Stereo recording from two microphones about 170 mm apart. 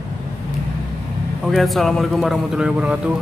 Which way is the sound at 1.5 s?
Centre (ahead or behind).